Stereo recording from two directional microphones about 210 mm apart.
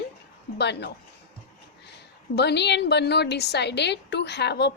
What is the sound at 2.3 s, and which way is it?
A woman's voice, 55° left (ahead or behind).